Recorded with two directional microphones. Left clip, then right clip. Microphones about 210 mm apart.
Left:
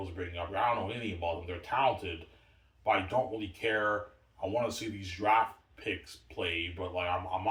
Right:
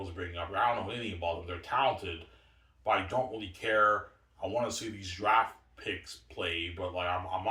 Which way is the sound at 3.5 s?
15° left (ahead or behind).